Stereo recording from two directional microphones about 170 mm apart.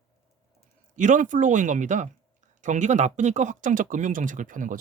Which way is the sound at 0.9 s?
50° right (ahead or behind).